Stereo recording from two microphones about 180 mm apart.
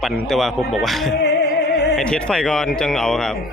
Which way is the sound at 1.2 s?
70° left (ahead or behind).